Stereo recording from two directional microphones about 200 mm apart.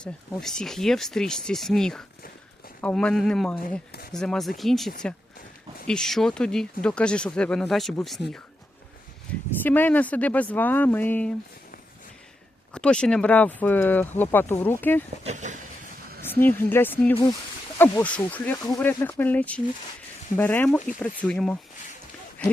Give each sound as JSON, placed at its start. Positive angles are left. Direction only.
{"t": 0.0, "sound": "speech", "side_deg": 5}
{"t": 5.9, "sound": "speech", "side_deg": 0}
{"t": 9.3, "sound": "speech", "side_deg": 5}
{"t": 12.7, "sound": "speech", "side_deg": 5}
{"t": 15.2, "sound": "speech", "side_deg": -35}
{"t": 16.2, "sound": "speech", "side_deg": 10}